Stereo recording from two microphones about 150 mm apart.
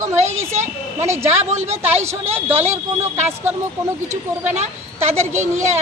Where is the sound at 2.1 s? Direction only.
15° right (ahead or behind).